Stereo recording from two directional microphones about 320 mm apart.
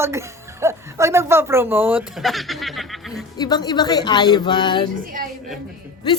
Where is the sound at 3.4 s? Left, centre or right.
Centre.